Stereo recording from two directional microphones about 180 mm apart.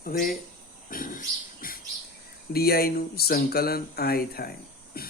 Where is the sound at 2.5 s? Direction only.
60° left (ahead or behind).